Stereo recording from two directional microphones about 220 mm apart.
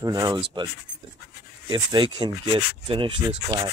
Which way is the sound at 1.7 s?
20° right (ahead or behind).